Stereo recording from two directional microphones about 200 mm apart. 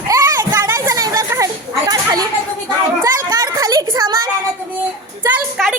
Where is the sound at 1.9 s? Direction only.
20° right (ahead or behind).